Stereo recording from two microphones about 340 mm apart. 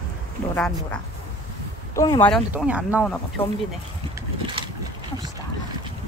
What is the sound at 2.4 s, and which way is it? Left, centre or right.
Speech, centre.